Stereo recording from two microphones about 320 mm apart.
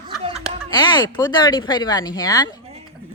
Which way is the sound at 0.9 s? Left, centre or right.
Centre.